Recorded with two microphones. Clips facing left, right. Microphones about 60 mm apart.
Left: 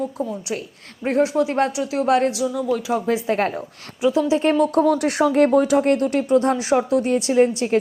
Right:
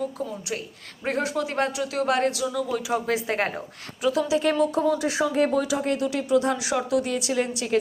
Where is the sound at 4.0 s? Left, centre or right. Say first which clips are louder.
Left 5 dB; centre.